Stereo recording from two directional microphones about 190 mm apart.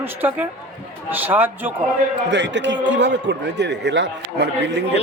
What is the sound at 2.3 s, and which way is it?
A man's voice, 65° right (ahead or behind).